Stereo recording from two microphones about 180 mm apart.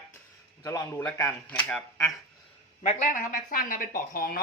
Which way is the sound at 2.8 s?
45° left (ahead or behind).